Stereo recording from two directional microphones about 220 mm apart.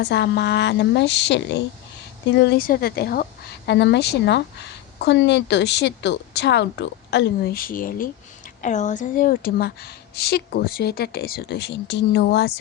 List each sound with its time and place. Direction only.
0.0 s speech: 50° left (ahead or behind)